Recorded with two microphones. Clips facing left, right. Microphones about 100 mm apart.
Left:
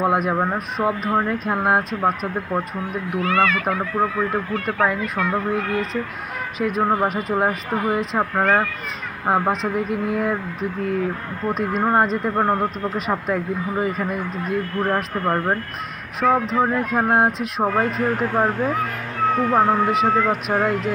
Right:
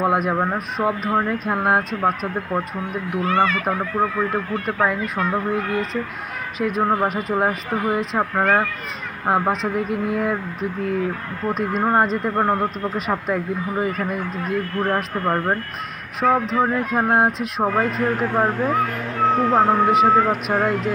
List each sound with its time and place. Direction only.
0.0 s speech: centre (ahead or behind)
3.2 s speech: 25° right (ahead or behind)
3.6 s speech: centre (ahead or behind)
19.3 s speech: 20° right (ahead or behind)
19.7 s speech: 5° right (ahead or behind)